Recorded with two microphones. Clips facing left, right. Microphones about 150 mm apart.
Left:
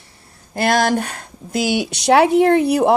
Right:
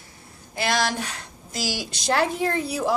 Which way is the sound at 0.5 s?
50° left (ahead or behind).